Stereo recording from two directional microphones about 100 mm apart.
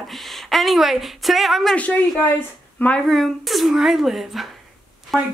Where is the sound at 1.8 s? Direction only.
15° left (ahead or behind).